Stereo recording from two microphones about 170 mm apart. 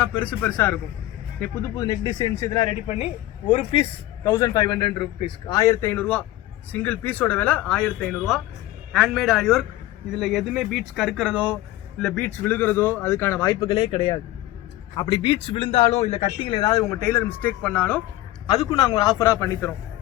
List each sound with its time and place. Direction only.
0.0 s a man's voice: 5° left (ahead or behind)
2.8 s speech: 35° left (ahead or behind)
4.2 s a man's voice: 20° left (ahead or behind)
18.4 s a man's voice: 30° left (ahead or behind)